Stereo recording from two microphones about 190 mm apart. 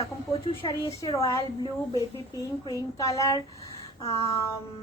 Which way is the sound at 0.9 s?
15° left (ahead or behind).